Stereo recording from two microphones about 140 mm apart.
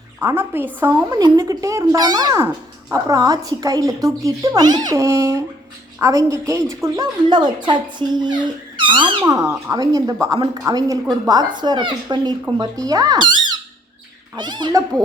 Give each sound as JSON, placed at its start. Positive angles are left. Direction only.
{"t": 0.2, "sound": "a woman's voice", "side_deg": -15}
{"t": 0.9, "sound": "a woman's voice", "side_deg": -25}
{"t": 14.3, "sound": "speech", "side_deg": -30}